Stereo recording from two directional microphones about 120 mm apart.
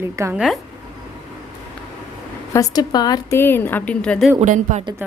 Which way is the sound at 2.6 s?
35° left (ahead or behind).